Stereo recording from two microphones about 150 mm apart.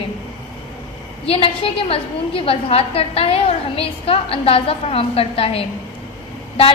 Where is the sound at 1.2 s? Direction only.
40° left (ahead or behind).